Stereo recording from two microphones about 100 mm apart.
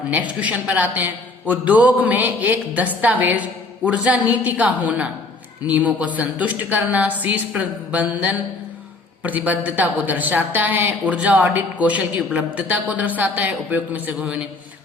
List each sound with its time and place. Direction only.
0.1 s a woman's voice: 15° right (ahead or behind)